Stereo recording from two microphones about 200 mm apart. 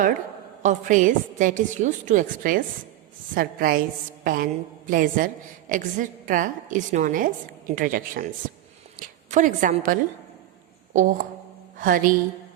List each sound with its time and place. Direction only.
0.6 s a woman's voice: 40° right (ahead or behind)